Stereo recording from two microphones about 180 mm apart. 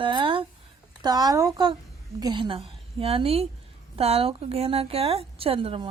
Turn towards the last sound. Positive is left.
turn(degrees=-30)  # may be behind; listen again after turning